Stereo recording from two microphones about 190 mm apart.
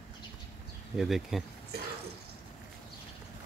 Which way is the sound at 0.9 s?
Centre (ahead or behind).